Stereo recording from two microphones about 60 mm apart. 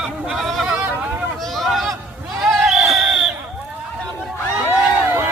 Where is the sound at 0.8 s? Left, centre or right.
Right.